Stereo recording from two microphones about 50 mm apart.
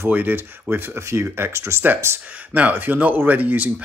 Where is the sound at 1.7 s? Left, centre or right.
Right.